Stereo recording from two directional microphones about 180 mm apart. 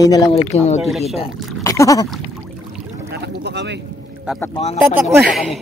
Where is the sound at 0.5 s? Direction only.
40° left (ahead or behind).